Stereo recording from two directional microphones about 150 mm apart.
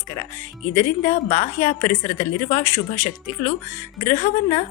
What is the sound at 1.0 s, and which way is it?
A woman's voice, 50° left (ahead or behind).